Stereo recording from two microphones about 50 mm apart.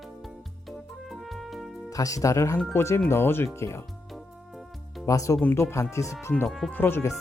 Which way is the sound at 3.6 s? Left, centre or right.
Left.